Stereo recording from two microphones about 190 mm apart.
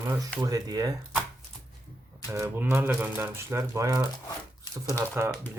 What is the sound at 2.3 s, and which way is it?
Speech, 10° right (ahead or behind).